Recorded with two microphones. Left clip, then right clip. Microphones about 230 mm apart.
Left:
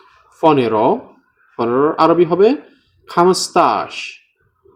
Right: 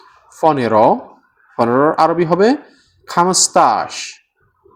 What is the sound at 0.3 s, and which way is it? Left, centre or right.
Speech, right.